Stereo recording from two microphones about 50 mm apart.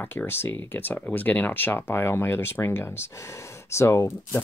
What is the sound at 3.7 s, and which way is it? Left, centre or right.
Speech, left.